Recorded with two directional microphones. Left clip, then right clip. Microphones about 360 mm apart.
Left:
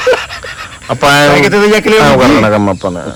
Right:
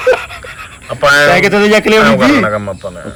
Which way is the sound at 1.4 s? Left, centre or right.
Centre.